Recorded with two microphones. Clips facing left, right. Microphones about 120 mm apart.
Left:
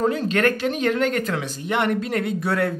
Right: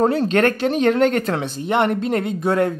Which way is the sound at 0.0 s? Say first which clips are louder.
Right 4 dB; 35° right (ahead or behind).